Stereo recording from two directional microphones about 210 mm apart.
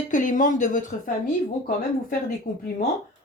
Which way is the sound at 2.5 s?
40° left (ahead or behind).